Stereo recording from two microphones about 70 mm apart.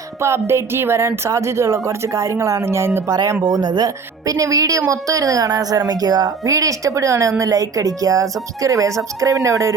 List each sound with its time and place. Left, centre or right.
0.2 s speech: right
3.4 s a woman's voice: right